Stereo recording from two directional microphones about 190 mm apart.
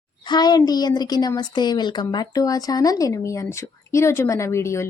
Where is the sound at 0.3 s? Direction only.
20° left (ahead or behind).